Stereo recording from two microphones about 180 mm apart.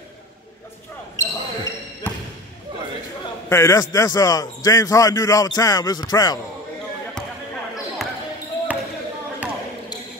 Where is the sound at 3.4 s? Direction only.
15° left (ahead or behind).